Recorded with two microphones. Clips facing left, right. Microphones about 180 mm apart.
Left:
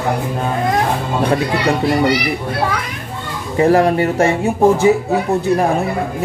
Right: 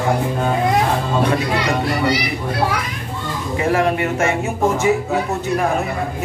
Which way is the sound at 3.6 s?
35° left (ahead or behind).